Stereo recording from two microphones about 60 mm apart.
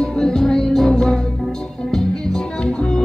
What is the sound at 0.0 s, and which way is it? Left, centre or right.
Music, centre.